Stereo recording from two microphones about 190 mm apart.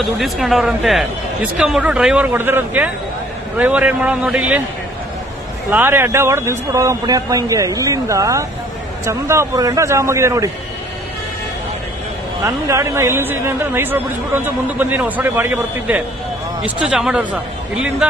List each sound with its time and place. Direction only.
0.0 s speech: centre (ahead or behind)
5.7 s speech: 10° right (ahead or behind)
12.5 s speech: 15° right (ahead or behind)